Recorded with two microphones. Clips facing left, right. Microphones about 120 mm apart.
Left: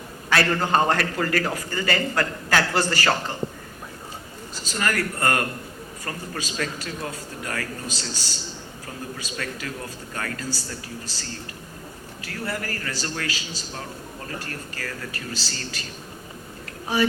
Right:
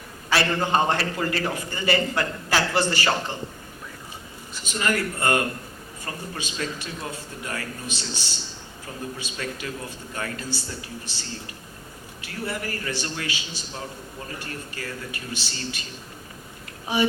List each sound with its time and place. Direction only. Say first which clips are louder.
0.3 s a man's voice: left 1 dB; 20° right (ahead or behind)
4.6 s a man's voice: even; 20° right (ahead or behind)
14.4 s a man's voice: even; 25° right (ahead or behind)